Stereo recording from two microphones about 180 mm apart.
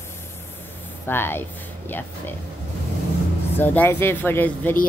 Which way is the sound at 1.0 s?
10° left (ahead or behind).